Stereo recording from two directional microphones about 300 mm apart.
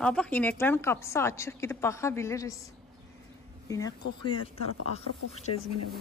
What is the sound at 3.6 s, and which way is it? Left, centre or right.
A woman's voice, centre.